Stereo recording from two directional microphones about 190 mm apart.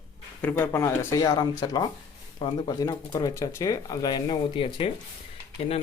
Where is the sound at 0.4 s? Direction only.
10° left (ahead or behind).